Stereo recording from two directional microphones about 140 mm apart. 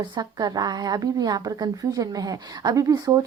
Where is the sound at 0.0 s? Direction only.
30° right (ahead or behind).